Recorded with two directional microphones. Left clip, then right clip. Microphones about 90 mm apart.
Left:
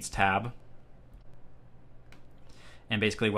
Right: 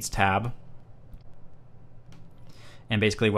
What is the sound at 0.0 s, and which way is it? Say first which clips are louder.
Speech: right 2 dB; 25° right (ahead or behind).